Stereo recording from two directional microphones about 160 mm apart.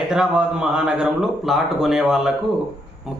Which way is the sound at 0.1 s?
5° right (ahead or behind).